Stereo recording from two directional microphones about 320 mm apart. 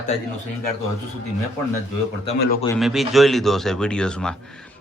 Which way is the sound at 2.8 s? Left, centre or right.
Centre.